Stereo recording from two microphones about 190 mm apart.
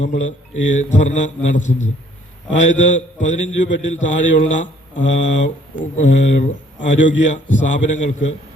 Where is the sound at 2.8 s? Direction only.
40° left (ahead or behind).